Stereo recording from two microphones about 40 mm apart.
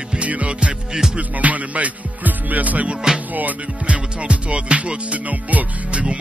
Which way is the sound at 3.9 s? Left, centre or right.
Right.